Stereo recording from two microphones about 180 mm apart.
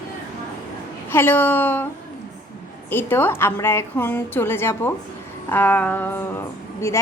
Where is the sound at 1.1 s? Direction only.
10° left (ahead or behind).